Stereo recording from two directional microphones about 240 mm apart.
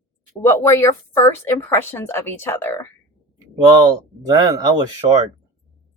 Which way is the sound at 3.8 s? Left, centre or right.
Centre.